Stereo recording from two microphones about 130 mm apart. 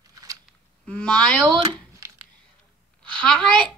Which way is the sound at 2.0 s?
25° right (ahead or behind).